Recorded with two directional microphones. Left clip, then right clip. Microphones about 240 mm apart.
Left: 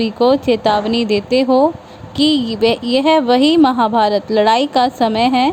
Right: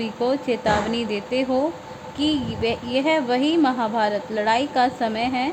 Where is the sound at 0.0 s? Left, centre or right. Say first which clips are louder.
Left 10 dB; left.